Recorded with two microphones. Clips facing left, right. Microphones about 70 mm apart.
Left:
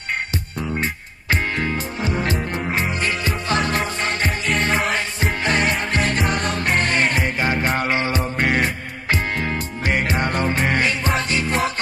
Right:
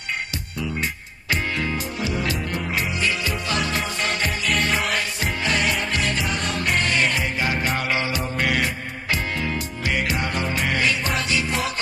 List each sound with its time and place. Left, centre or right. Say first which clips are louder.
0.6 s music: left 2 dB; left